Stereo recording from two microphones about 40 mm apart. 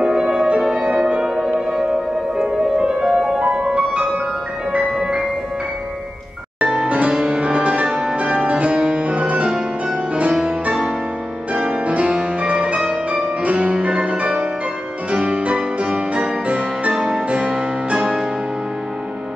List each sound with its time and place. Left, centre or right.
0.0 s music: centre
2.4 s music: right
6.9 s music: right
8.5 s music: right
11.5 s music: right
12.8 s music: centre
13.4 s music: right